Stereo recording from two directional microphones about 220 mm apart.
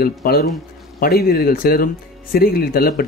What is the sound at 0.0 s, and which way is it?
A man's voice, 45° left (ahead or behind).